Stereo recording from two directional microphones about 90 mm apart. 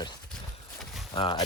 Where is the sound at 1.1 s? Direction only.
70° left (ahead or behind).